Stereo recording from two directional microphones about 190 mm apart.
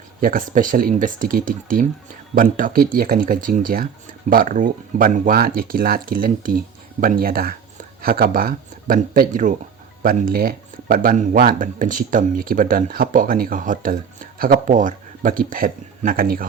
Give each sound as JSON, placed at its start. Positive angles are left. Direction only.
{"t": 0.2, "sound": "speech", "side_deg": -45}